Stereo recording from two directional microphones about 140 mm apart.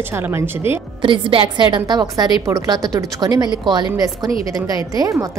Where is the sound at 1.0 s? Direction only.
40° right (ahead or behind).